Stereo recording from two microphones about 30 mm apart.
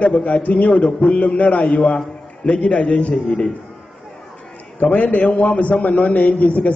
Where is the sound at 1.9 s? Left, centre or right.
Left.